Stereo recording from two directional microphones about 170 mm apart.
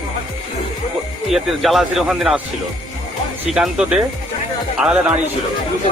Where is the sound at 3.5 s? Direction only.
5° right (ahead or behind).